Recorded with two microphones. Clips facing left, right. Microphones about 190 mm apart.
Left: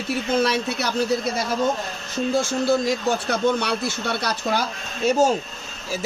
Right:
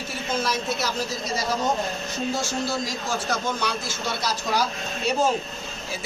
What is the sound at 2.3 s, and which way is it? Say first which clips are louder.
Speech: left 9 dB; 55° left (ahead or behind).